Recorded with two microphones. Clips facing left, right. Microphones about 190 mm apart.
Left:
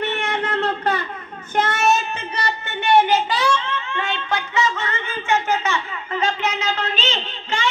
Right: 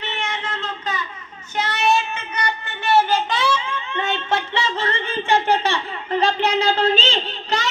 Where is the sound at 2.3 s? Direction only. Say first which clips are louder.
Left 1 dB; 25° left (ahead or behind).